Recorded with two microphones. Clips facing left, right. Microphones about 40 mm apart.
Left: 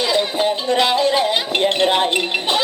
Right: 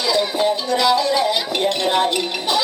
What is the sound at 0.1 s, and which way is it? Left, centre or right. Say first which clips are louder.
Speech: even; left.